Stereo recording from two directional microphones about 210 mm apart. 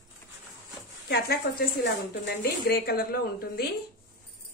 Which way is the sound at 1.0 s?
50° left (ahead or behind).